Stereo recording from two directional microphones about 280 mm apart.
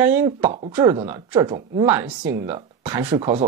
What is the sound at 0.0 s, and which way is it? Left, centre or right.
Speech, centre.